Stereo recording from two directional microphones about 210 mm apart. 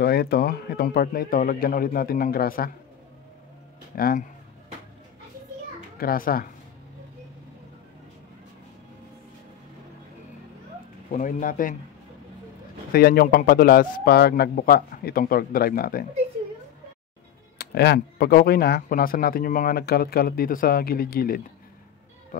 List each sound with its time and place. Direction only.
0.0 s speech: 50° left (ahead or behind)
3.9 s speech: 45° left (ahead or behind)
5.9 s speech: 45° left (ahead or behind)
11.1 s speech: 35° left (ahead or behind)
12.9 s speech: 45° left (ahead or behind)
17.6 s speech: 50° left (ahead or behind)
22.3 s music: 40° left (ahead or behind)